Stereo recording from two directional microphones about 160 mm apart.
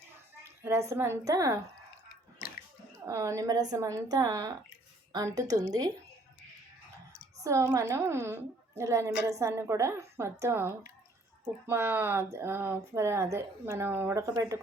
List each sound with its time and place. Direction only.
0.6 s speech: 20° right (ahead or behind)
3.1 s a woman's voice: 20° right (ahead or behind)
7.4 s speech: 20° right (ahead or behind)